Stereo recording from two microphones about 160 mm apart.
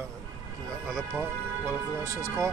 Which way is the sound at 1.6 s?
20° right (ahead or behind).